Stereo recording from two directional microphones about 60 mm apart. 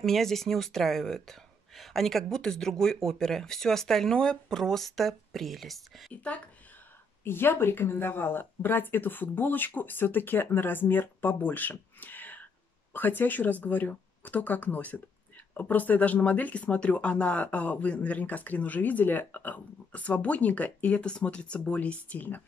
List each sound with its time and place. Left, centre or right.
0.0 s speech: centre
7.2 s speech: left